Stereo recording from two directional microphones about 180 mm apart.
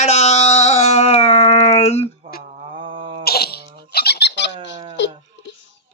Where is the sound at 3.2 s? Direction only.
60° left (ahead or behind).